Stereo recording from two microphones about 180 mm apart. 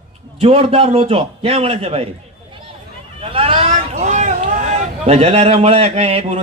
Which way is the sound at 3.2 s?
35° right (ahead or behind).